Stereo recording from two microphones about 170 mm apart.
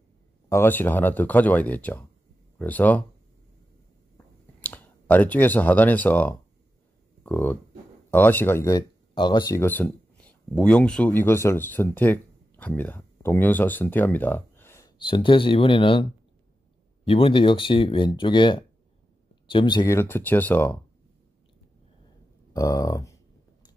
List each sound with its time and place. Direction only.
0.5 s speech: 15° left (ahead or behind)
4.6 s speech: 10° left (ahead or behind)
15.0 s speech: 30° left (ahead or behind)
20.0 s speech: 15° left (ahead or behind)
22.5 s speech: 20° left (ahead or behind)